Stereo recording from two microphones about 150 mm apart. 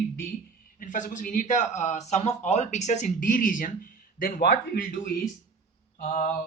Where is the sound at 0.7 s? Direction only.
60° left (ahead or behind); by 5.1 s 75° left (ahead or behind).